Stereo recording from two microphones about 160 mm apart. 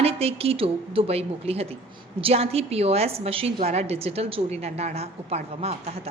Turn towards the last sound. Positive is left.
turn(degrees=-40)  # may be behind; listen again after turning